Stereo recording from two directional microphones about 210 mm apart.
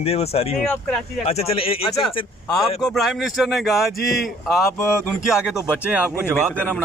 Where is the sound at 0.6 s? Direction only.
5° left (ahead or behind).